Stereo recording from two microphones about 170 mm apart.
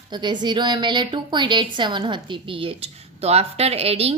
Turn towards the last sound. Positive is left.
turn(degrees=-35)  # may be behind; listen again after turning